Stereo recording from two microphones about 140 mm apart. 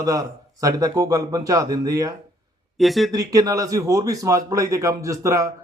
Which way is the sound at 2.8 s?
Centre (ahead or behind).